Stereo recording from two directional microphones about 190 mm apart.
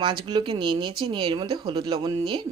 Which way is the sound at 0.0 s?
25° right (ahead or behind).